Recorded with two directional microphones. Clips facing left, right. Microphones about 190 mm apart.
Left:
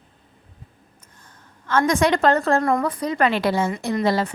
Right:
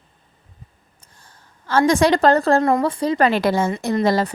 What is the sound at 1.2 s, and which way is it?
A woman's voice, 30° right (ahead or behind).